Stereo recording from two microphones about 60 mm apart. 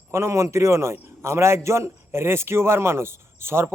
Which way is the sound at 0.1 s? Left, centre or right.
Right.